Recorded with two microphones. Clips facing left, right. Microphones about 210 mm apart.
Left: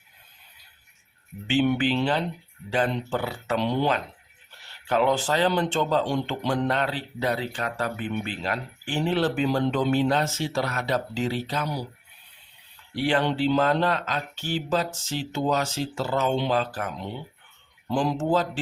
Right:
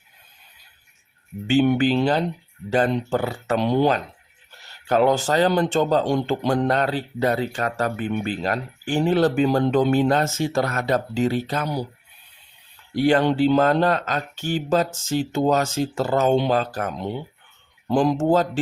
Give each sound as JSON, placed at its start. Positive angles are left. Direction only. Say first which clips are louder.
{"t": 1.5, "sound": "speech", "louder": "right 5 dB", "side_deg": -45}
{"t": 12.9, "sound": "speech", "louder": "right 6 dB", "side_deg": -45}